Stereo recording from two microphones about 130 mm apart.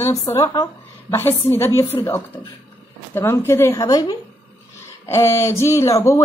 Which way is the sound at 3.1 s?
20° left (ahead or behind).